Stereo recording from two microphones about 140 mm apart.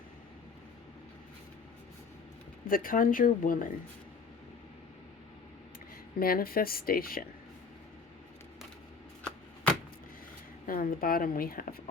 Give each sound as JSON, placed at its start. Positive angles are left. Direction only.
{"t": 2.6, "sound": "speech", "side_deg": 90}
{"t": 6.1, "sound": "a woman's voice", "side_deg": 90}
{"t": 10.7, "sound": "a woman's voice", "side_deg": 90}